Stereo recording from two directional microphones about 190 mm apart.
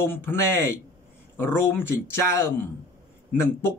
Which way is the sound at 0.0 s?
10° left (ahead or behind).